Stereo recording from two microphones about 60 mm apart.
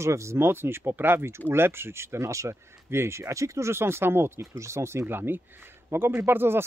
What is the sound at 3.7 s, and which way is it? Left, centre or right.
Speech, right.